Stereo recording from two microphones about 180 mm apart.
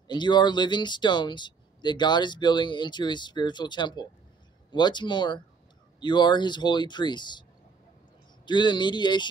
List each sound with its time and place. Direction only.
0.1 s speech: 25° left (ahead or behind)
8.5 s speech: 25° left (ahead or behind)